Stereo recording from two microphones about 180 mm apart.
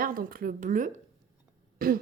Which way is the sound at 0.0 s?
50° right (ahead or behind).